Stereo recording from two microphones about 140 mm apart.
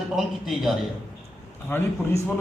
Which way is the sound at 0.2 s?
Centre (ahead or behind).